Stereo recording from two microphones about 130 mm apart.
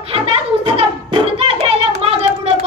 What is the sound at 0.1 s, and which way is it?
Hands, 45° right (ahead or behind).